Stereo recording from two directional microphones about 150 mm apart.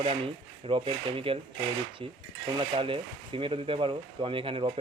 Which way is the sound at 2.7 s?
35° right (ahead or behind).